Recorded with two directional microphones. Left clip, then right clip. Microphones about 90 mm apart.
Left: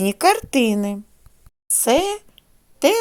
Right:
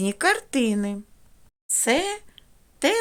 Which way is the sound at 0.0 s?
30° left (ahead or behind).